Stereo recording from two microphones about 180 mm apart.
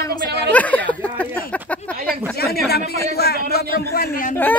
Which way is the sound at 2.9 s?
60° left (ahead or behind).